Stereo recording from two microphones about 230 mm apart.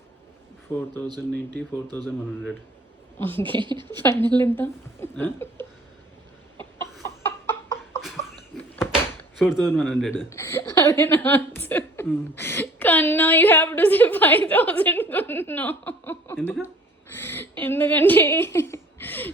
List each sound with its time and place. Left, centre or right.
1.3 s a man's voice: centre
3.4 s a woman's voice: right
4.0 s a woman's voice: centre
7.0 s chicken: centre
8.5 s door: centre
9.4 s a man's voice: centre
10.2 s a woman's voice: centre
17.2 s a sound: centre
17.6 s a woman's voice: centre